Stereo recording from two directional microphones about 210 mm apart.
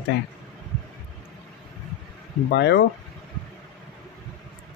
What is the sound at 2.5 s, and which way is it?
Speech, 55° left (ahead or behind).